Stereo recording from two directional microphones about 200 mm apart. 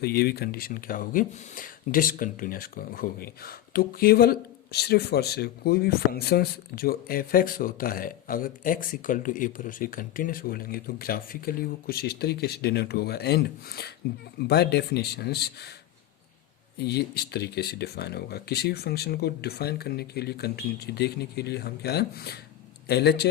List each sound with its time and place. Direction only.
0.0 s speech: 50° left (ahead or behind)
16.7 s speech: 55° left (ahead or behind)